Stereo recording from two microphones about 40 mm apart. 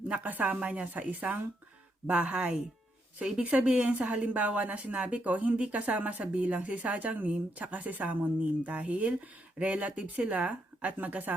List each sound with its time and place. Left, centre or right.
0.3 s speech: right
0.6 s speech: right
3.4 s speech: right
3.9 s speech: right
8.0 s speech: right